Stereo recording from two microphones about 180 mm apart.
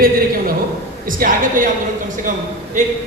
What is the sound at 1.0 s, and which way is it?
Speech, 50° right (ahead or behind).